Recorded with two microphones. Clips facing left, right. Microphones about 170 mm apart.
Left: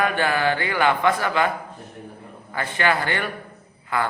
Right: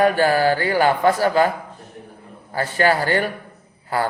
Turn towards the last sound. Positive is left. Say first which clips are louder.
# right 3 dB
turn(degrees=-40)  # may be behind; listen again after turning